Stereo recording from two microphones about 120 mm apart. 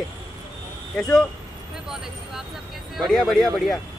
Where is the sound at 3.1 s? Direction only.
Centre (ahead or behind).